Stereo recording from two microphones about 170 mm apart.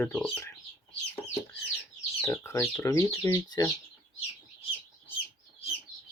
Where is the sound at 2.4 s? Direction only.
15° left (ahead or behind).